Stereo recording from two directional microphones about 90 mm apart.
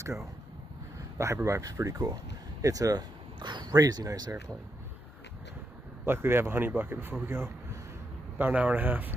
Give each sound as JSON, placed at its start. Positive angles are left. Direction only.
{"t": 0.0, "sound": "speech", "side_deg": -35}
{"t": 3.3, "sound": "speech", "side_deg": -55}
{"t": 6.0, "sound": "speech", "side_deg": -25}